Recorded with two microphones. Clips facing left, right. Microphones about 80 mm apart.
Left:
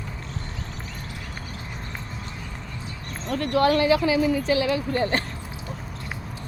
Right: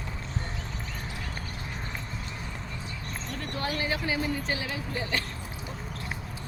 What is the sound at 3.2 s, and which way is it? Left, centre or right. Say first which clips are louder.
Speech: left 14 dB; left.